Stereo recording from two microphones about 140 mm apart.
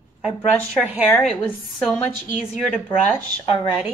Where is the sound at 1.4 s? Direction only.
15° left (ahead or behind).